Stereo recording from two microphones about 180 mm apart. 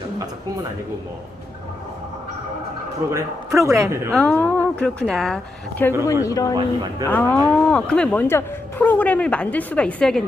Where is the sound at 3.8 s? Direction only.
15° right (ahead or behind).